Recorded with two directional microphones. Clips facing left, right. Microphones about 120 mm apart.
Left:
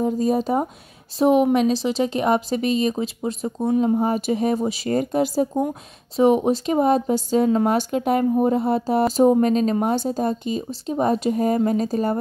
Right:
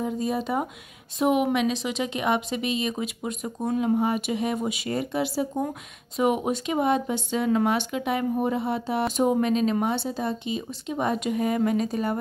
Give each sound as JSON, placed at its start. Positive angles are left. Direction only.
{"t": 0.0, "sound": "speech", "side_deg": 40}
{"t": 3.8, "sound": "speech", "side_deg": 40}
{"t": 6.1, "sound": "speech", "side_deg": 30}